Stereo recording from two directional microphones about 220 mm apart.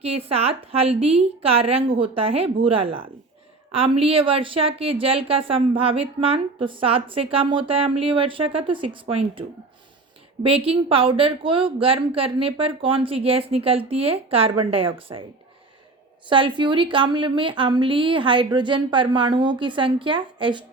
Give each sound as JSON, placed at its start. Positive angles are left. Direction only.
{"t": 0.0, "sound": "speech", "side_deg": -25}
{"t": 10.4, "sound": "speech", "side_deg": -25}
{"t": 16.3, "sound": "speech", "side_deg": -20}